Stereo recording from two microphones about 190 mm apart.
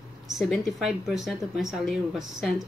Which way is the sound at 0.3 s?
Centre (ahead or behind).